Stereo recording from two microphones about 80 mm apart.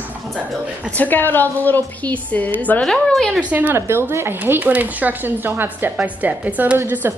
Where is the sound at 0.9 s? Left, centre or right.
Left.